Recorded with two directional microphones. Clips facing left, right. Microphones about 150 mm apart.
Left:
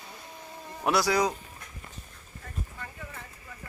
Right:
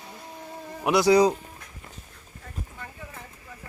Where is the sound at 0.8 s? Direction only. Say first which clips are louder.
Right 6 dB; 20° right (ahead or behind).